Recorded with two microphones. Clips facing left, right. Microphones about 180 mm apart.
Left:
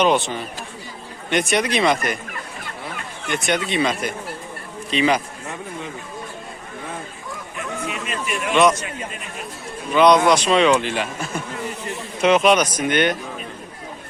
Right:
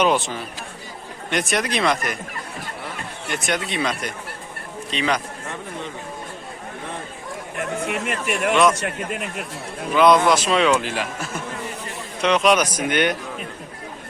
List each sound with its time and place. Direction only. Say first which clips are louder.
0.0 s speech: left 1 dB; 5° right (ahead or behind)
3.2 s speech: left 3 dB; centre (ahead or behind)
7.5 s speech: right 4 dB; 60° right (ahead or behind)
8.8 s a man's voice: right 4 dB; 70° right (ahead or behind)
9.9 s speech: left 1 dB; 5° right (ahead or behind)
12.5 s speech: left 1 dB; 10° right (ahead or behind)